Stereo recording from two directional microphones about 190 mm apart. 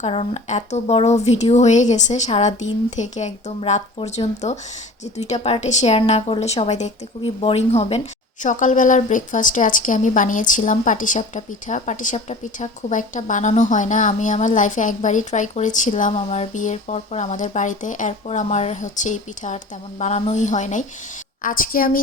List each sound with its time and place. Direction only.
0.0 s a woman's voice: 35° left (ahead or behind); by 22.0 s 50° left (ahead or behind)